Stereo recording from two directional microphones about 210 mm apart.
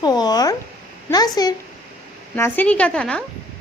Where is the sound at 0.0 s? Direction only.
20° left (ahead or behind).